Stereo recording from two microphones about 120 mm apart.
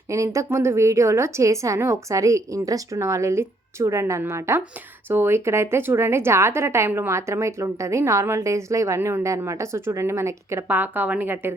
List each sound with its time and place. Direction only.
0.1 s a woman's voice: 25° right (ahead or behind)